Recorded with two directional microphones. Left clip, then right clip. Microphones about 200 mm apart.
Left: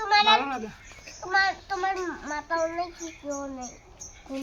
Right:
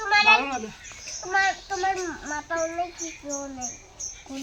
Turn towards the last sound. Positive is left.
turn(degrees=20)  # may be behind; listen again after turning